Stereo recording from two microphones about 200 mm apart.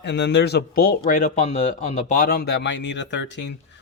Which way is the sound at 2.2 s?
45° left (ahead or behind).